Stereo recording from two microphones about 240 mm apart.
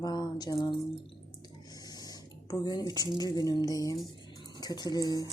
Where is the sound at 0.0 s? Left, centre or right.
Centre.